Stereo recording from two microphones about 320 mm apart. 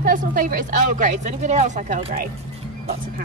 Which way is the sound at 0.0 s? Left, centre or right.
Right.